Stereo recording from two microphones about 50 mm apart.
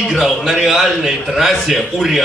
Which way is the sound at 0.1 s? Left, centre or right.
Centre.